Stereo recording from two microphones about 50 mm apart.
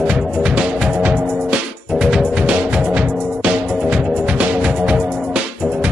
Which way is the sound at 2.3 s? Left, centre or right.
Right.